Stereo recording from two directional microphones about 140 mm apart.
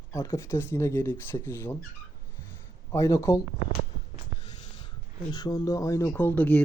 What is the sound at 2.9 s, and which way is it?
Speech, 20° left (ahead or behind).